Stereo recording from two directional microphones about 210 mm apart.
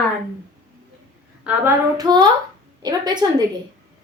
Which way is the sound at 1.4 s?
15° right (ahead or behind).